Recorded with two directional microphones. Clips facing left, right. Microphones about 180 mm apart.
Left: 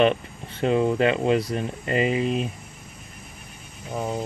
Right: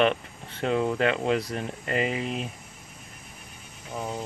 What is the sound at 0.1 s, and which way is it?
Speech, 10° left (ahead or behind).